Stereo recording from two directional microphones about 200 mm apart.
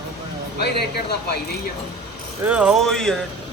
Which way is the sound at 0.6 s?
55° left (ahead or behind).